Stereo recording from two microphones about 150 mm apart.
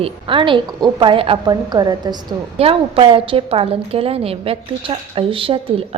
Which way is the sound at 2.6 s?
40° right (ahead or behind).